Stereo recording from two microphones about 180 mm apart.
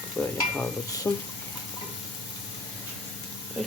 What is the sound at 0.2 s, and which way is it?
Speech, 10° left (ahead or behind).